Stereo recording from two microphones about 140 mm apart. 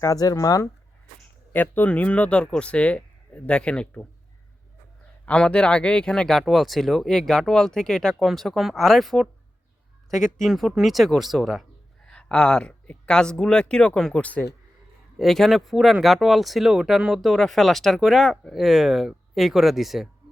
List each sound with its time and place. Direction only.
0.0 s speech: 25° left (ahead or behind)
1.5 s speech: 10° left (ahead or behind)
5.2 s speech: 10° left (ahead or behind)
10.4 s speech: centre (ahead or behind)